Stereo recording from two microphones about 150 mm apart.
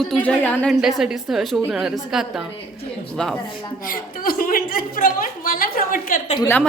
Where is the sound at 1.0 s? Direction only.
5° right (ahead or behind).